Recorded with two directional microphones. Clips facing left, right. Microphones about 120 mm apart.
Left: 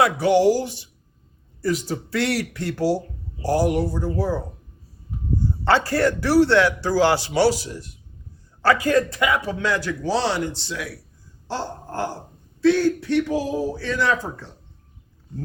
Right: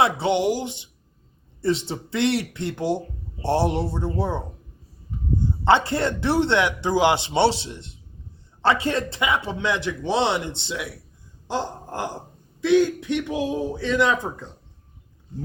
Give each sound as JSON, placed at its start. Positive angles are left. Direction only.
{"t": 0.0, "sound": "a man's voice", "side_deg": -25}
{"t": 5.6, "sound": "a man's voice", "side_deg": -20}
{"t": 11.4, "sound": "a sound", "side_deg": -15}
{"t": 12.5, "sound": "a man's voice", "side_deg": -15}